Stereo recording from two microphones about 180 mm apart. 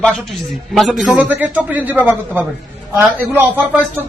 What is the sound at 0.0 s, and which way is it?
Speech, 5° left (ahead or behind).